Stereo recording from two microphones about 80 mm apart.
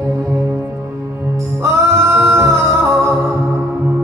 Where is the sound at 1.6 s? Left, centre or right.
Right.